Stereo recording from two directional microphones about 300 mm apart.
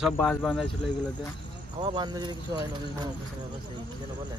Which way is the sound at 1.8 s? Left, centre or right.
Centre.